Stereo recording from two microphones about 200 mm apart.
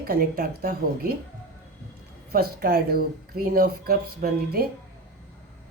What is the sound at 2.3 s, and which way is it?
Speech, 50° right (ahead or behind).